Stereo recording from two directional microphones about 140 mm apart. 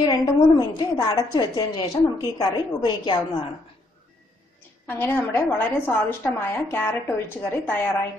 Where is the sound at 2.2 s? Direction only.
30° left (ahead or behind).